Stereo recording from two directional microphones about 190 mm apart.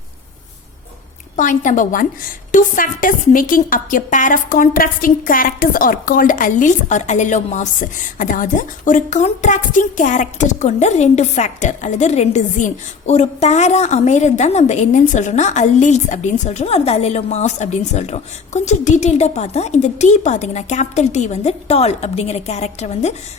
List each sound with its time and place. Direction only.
1.4 s a woman's voice: 40° left (ahead or behind)